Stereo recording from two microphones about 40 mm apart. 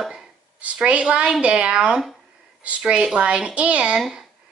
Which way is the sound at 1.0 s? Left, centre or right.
Right.